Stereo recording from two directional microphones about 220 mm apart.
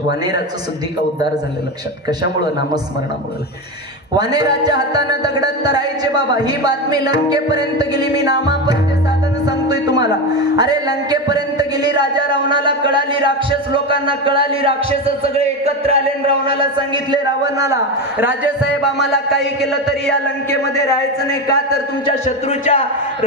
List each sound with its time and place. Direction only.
4.2 s music: 20° right (ahead or behind)
9.7 s a sound: 20° right (ahead or behind)
10.6 s a man's voice: 15° right (ahead or behind)
16.5 s music: 20° right (ahead or behind)
18.9 s music: 50° left (ahead or behind)
19.6 s a sound: centre (ahead or behind)
20.7 s a man's voice: 15° left (ahead or behind)
22.0 s a man's voice: 30° left (ahead or behind)